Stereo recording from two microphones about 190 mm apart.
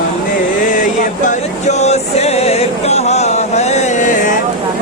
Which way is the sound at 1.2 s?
35° left (ahead or behind).